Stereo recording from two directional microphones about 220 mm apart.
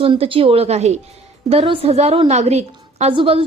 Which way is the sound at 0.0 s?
25° right (ahead or behind).